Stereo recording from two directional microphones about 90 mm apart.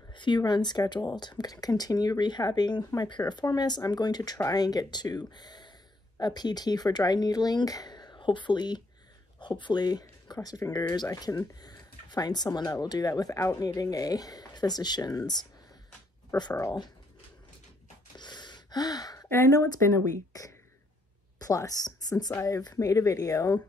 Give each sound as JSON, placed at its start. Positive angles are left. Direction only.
{"t": 0.1, "sound": "a sound", "side_deg": 60}
{"t": 0.4, "sound": "speech", "side_deg": 55}
{"t": 18.1, "sound": "gasp", "side_deg": 55}
{"t": 19.2, "sound": "a woman's voice", "side_deg": 30}